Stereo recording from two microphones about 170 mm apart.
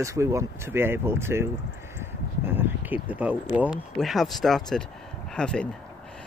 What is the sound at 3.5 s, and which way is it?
Speech, 5° right (ahead or behind).